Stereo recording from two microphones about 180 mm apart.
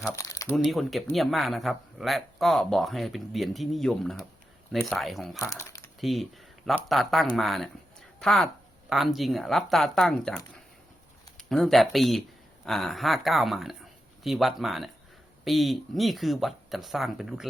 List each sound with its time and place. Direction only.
0.2 s speech: 20° left (ahead or behind)
0.5 s speech: centre (ahead or behind)
5.4 s speech: 15° left (ahead or behind)
6.0 s a sound: centre (ahead or behind)
6.8 s speech: centre (ahead or behind)